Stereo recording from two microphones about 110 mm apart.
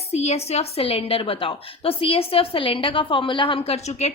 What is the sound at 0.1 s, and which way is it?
A woman's voice, 75° left (ahead or behind).